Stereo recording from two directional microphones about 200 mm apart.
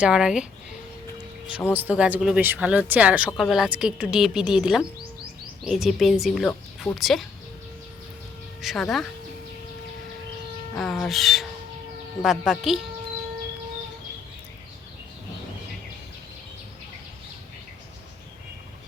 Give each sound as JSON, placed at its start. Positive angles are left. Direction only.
{"t": 0.0, "sound": "speech", "side_deg": -5}
{"t": 1.7, "sound": "speech", "side_deg": -10}
{"t": 8.6, "sound": "speech", "side_deg": 0}
{"t": 10.8, "sound": "speech", "side_deg": 0}